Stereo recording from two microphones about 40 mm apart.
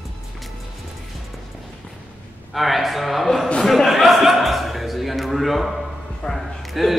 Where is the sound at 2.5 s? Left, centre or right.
Centre.